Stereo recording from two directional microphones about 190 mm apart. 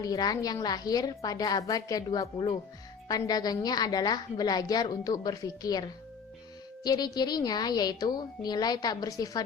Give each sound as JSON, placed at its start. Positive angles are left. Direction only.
{"t": 0.0, "sound": "a woman's voice", "side_deg": 20}
{"t": 6.8, "sound": "a woman's voice", "side_deg": 20}